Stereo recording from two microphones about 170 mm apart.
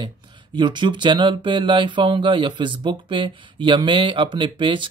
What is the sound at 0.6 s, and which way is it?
Speech, 25° right (ahead or behind).